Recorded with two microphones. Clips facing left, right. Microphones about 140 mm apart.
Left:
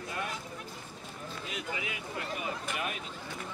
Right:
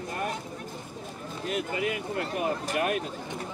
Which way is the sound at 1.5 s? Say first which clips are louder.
Right 11 dB; 50° right (ahead or behind).